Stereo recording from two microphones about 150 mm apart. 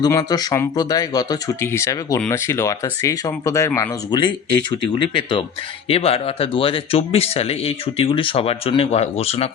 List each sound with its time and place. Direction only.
0.1 s speech: 25° left (ahead or behind); by 9.5 s 45° left (ahead or behind)